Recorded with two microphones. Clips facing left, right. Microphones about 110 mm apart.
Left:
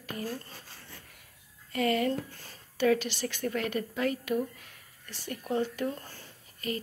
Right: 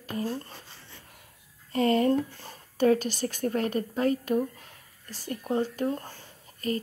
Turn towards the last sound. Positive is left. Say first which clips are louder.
# right 5 dB
turn(degrees=-40)  # may be behind; listen again after turning